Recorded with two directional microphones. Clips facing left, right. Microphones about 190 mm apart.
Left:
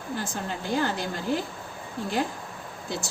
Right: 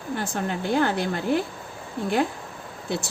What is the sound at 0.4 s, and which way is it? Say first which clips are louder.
Speech: right 5 dB; 60° right (ahead or behind).